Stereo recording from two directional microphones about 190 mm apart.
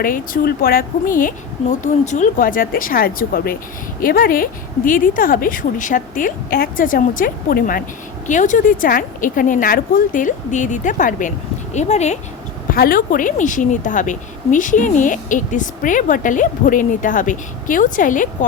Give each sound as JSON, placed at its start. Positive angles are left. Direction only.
{"t": 0.0, "sound": "a woman's voice", "side_deg": 50}
{"t": 12.7, "sound": "a woman's voice", "side_deg": 50}